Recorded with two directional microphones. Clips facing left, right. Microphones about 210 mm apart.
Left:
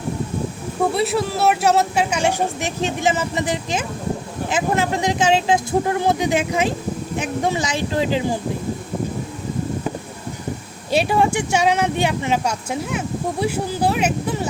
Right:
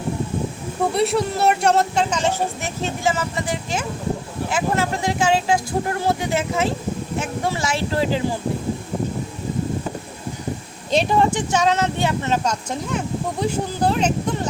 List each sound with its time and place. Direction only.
0.9 s speech: centre (ahead or behind); by 8.2 s 20° left (ahead or behind)
10.9 s speech: 10° left (ahead or behind)